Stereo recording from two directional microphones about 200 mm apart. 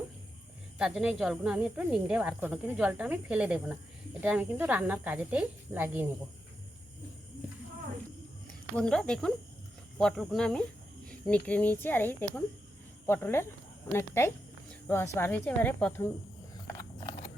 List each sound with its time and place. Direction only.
0.8 s speech: 5° right (ahead or behind)
8.7 s a woman's voice: 5° left (ahead or behind)
17.0 s horse: 30° left (ahead or behind)